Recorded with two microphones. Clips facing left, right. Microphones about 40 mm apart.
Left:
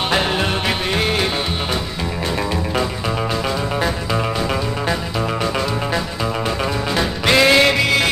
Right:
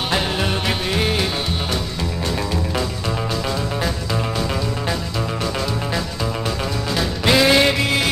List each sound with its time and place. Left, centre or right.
7.0 s music: centre